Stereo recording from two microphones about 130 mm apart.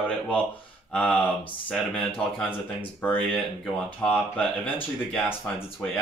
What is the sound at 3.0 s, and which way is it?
Speech, 10° left (ahead or behind).